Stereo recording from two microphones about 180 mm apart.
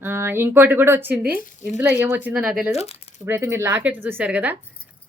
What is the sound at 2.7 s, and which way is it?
Speech, 35° left (ahead or behind).